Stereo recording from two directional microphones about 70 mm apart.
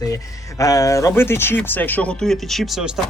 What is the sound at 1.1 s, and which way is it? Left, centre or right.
Speech, left.